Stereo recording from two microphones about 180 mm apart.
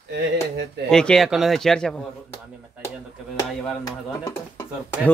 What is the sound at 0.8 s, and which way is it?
Speech, 5° left (ahead or behind).